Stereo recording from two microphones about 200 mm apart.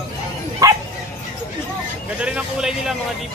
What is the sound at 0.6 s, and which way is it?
Speech, 20° right (ahead or behind).